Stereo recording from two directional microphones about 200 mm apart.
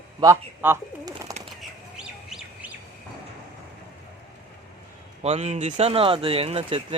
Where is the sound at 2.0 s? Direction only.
5° right (ahead or behind).